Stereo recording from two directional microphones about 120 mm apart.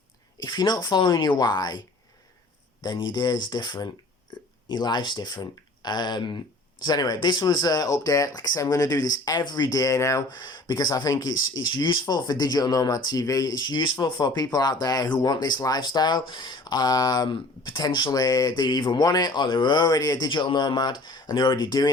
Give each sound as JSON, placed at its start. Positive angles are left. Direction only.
{"t": 0.4, "sound": "speech", "side_deg": 35}
{"t": 2.8, "sound": "speech", "side_deg": 40}
{"t": 10.3, "sound": "speech", "side_deg": 35}